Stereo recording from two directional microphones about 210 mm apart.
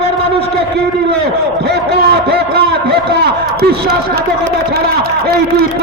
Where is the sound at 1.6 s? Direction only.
50° right (ahead or behind).